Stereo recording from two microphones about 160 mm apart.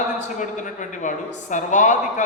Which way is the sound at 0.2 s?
50° left (ahead or behind).